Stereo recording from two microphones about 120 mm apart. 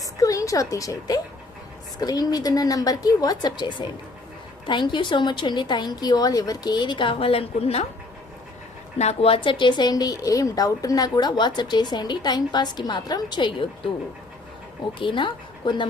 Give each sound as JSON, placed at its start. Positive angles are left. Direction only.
{"t": 0.0, "sound": "a woman's voice", "side_deg": 30}
{"t": 9.0, "sound": "speech", "side_deg": 60}
{"t": 14.9, "sound": "speech", "side_deg": 45}